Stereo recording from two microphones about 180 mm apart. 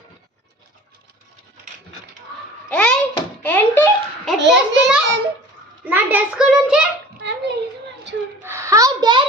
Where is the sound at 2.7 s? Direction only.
5° left (ahead or behind).